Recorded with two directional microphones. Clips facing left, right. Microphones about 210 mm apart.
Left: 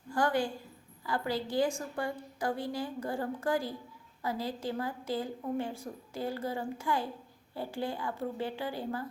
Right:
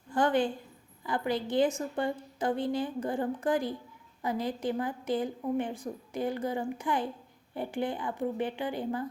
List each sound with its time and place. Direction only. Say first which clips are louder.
0.1 s a woman's voice: right 3 dB; 20° right (ahead or behind)